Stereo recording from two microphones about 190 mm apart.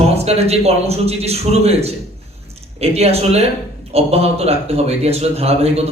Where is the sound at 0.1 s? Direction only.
35° right (ahead or behind).